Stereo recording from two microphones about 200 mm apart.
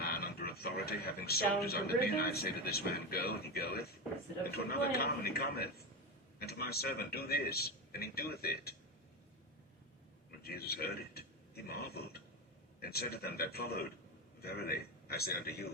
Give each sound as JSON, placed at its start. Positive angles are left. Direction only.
{"t": 0.0, "sound": "speech", "side_deg": 50}
{"t": 10.4, "sound": "speech", "side_deg": 50}